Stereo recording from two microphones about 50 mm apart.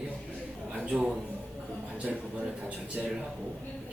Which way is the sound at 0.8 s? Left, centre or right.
Centre.